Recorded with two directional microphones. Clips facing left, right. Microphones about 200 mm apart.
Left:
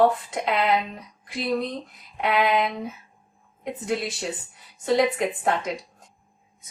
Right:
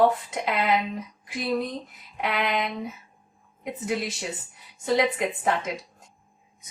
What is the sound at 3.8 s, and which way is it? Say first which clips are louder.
A woman's voice: left 1 dB; centre (ahead or behind).